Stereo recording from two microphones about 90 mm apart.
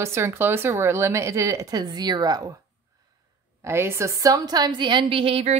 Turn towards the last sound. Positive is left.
turn(degrees=-90)